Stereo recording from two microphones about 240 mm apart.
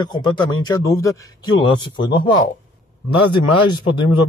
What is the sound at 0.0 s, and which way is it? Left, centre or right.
A man's voice, centre.